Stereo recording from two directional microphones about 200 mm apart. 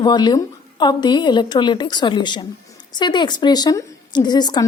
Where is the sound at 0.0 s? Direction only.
20° left (ahead or behind).